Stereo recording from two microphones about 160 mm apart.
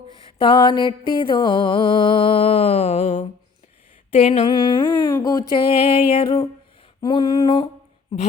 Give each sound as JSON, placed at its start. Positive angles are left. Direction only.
{"t": 0.3, "sound": "mantra", "side_deg": 30}
{"t": 4.1, "sound": "humming", "side_deg": 35}
{"t": 5.6, "sound": "mantra", "side_deg": 40}
{"t": 7.0, "sound": "humming", "side_deg": 30}